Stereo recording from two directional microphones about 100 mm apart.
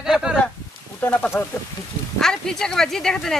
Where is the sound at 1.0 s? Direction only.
15° left (ahead or behind).